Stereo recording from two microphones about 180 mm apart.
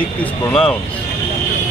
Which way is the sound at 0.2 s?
5° left (ahead or behind).